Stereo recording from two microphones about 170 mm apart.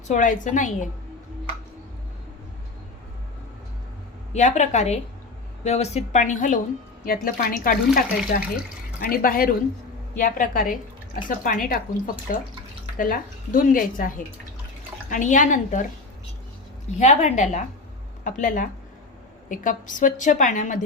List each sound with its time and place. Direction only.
0.1 s a woman's voice: 50° left (ahead or behind)
4.3 s a woman's voice: 45° left (ahead or behind)
15.1 s a woman's voice: 50° left (ahead or behind)
17.0 s a woman's voice: 45° left (ahead or behind)